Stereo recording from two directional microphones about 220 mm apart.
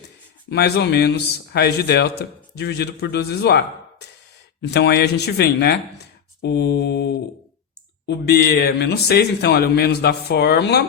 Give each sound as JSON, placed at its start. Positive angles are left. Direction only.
{"t": 0.5, "sound": "speech", "side_deg": 50}
{"t": 4.7, "sound": "speech", "side_deg": 50}